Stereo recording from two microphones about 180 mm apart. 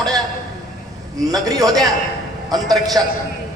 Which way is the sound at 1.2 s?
20° right (ahead or behind).